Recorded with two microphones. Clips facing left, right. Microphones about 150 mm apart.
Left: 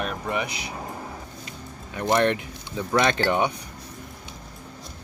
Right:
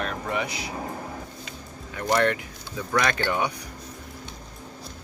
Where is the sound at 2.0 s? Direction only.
20° left (ahead or behind).